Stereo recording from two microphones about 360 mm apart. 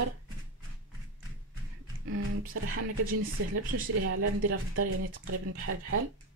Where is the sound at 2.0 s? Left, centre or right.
Right.